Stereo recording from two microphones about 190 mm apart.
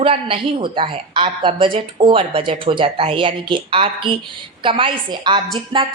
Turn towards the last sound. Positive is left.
turn(degrees=-25)  # may be behind; listen again after turning